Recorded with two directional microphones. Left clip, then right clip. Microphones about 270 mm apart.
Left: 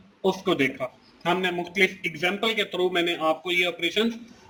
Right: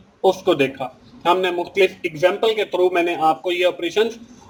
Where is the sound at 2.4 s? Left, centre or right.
Centre.